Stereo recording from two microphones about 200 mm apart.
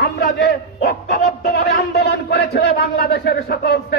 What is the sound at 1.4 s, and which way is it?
A man's voice, 50° left (ahead or behind).